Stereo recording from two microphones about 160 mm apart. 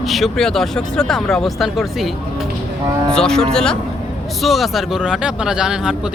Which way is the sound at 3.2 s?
5° left (ahead or behind).